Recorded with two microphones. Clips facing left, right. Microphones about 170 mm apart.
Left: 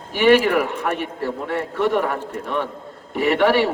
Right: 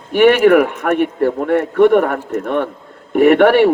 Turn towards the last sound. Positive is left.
turn(degrees=-55)  # may be behind; listen again after turning